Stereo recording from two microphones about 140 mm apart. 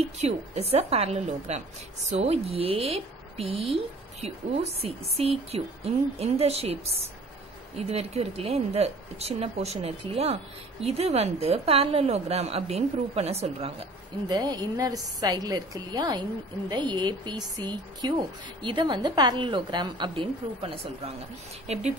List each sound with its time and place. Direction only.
0.2 s a woman's voice: 50° right (ahead or behind)
14.3 s a woman's voice: 30° right (ahead or behind); by 21.8 s 50° right (ahead or behind)